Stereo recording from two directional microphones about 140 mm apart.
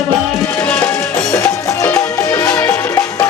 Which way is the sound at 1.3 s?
25° left (ahead or behind).